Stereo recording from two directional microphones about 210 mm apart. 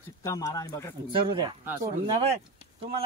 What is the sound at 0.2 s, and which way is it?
Speech, 15° left (ahead or behind).